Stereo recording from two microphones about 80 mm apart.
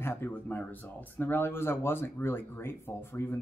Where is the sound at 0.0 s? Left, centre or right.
Left.